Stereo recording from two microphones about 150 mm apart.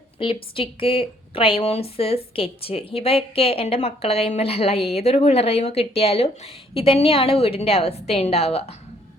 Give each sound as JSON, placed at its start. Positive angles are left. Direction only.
{"t": 0.5, "sound": "speech", "side_deg": 35}